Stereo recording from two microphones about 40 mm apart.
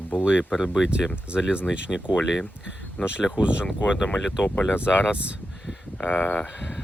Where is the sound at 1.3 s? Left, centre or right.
Right.